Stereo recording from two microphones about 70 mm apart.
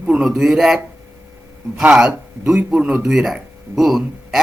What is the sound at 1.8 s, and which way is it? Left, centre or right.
Speech, centre.